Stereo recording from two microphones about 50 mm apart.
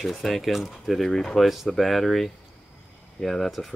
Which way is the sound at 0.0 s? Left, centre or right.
Centre.